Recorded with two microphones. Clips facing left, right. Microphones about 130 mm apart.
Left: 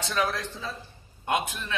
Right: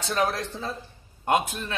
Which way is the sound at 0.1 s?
45° right (ahead or behind).